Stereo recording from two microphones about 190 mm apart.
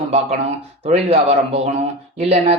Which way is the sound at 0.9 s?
35° right (ahead or behind).